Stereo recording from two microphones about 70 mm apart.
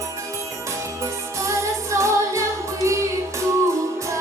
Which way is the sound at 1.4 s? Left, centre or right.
Right.